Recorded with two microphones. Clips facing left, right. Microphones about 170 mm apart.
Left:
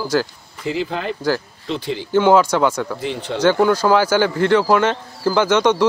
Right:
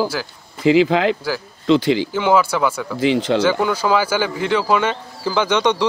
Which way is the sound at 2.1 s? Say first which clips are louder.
Left 8 dB; 10° right (ahead or behind).